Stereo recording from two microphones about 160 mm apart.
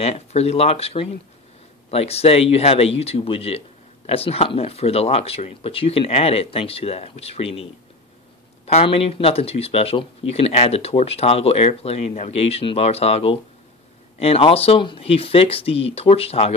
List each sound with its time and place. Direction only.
0.0 s speech: 40° left (ahead or behind)
8.6 s speech: 40° left (ahead or behind)